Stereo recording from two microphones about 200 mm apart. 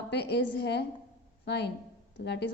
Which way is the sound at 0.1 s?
55° left (ahead or behind).